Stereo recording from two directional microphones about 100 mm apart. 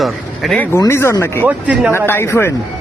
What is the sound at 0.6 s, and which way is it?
Speech, 25° left (ahead or behind).